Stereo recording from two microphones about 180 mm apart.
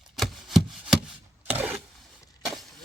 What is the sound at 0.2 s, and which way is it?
Chopping, centre (ahead or behind).